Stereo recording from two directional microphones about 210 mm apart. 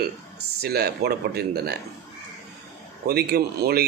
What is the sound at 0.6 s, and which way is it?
Speech, 50° right (ahead or behind).